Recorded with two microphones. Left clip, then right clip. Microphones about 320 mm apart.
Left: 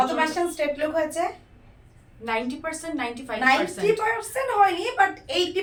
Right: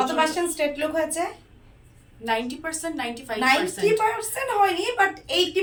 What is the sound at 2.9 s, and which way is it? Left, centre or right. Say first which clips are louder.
A woman's voice: even; centre.